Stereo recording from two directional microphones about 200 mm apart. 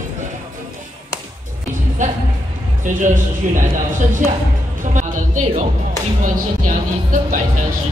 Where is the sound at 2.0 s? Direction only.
40° right (ahead or behind).